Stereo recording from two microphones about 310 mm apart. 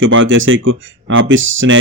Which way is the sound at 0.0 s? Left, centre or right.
Right.